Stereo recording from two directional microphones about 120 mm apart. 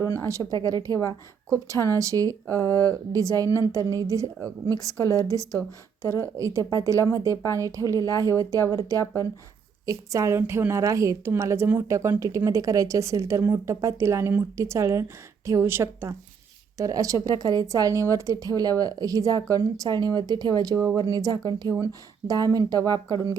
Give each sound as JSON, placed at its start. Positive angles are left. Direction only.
{"t": 0.0, "sound": "a woman's voice", "side_deg": -25}